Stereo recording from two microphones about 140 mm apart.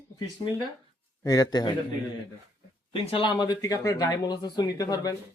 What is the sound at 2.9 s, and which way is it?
Speech, 40° left (ahead or behind).